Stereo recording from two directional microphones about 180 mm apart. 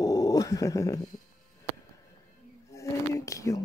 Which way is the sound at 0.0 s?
20° left (ahead or behind).